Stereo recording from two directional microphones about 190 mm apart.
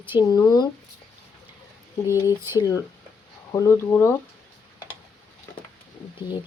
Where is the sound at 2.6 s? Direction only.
20° left (ahead or behind).